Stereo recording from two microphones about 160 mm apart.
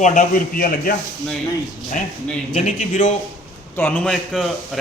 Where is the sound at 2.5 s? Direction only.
50° left (ahead or behind).